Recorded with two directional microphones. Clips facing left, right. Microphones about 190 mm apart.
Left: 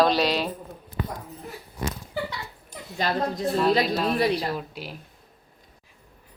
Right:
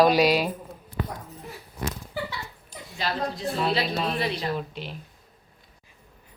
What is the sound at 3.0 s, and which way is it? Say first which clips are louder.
Speech: left 3 dB; 45° left (ahead or behind).